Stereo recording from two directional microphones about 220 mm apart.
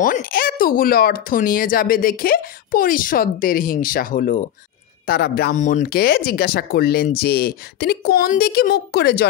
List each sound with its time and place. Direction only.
0.0 s speech: 40° left (ahead or behind)